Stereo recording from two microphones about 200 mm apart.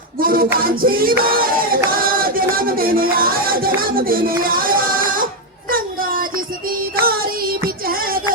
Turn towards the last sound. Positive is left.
turn(degrees=-45)  # may be behind; listen again after turning